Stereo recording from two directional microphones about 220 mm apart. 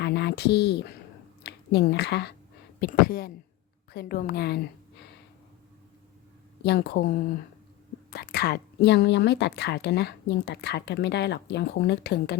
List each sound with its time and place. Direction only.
0.0 s speech: 50° left (ahead or behind)
6.6 s speech: 50° left (ahead or behind)